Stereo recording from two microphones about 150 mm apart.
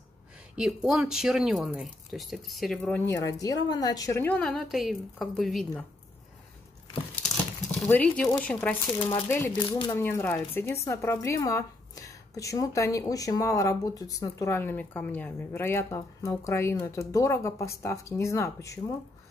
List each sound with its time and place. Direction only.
0.8 s speech: 5° right (ahead or behind)
3.1 s speech: 20° left (ahead or behind)
4.2 s speech: 10° left (ahead or behind)
7.8 s speech: 5° left (ahead or behind)
8.9 s speech: 20° left (ahead or behind)